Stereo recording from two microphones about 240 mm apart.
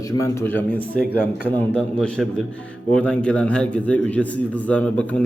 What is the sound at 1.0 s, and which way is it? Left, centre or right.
Speech, centre.